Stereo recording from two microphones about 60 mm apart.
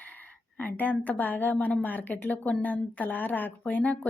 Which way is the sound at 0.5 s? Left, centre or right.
Left.